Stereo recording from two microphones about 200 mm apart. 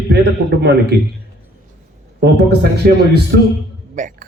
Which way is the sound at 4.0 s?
40° right (ahead or behind).